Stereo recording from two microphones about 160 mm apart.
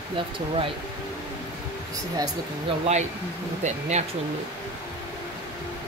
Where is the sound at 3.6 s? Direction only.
45° right (ahead or behind).